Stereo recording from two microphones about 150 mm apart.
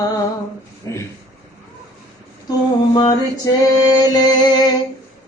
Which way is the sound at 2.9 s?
30° left (ahead or behind).